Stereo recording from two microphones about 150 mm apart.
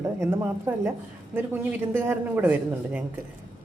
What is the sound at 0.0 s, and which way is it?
Speech, 20° right (ahead or behind).